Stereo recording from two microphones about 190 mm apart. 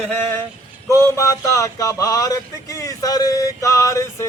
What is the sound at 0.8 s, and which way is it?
Speech, 15° left (ahead or behind).